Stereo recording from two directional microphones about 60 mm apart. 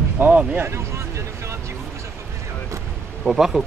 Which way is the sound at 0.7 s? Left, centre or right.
Right.